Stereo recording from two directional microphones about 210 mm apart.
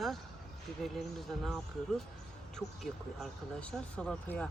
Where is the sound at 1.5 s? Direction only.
Centre (ahead or behind).